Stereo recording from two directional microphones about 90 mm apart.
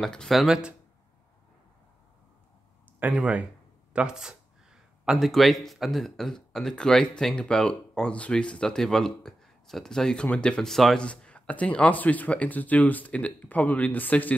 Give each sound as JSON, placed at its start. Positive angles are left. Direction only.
{"t": 0.0, "sound": "speech", "side_deg": 5}
{"t": 3.0, "sound": "speech", "side_deg": -15}